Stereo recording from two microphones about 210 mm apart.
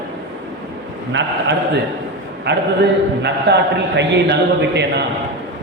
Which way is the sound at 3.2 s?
55° right (ahead or behind).